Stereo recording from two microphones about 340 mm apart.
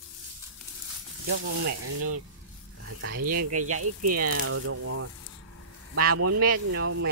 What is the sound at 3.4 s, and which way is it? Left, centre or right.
Speech, right.